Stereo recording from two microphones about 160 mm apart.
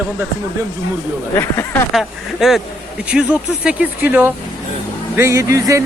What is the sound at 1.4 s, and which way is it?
Speech, 15° left (ahead or behind).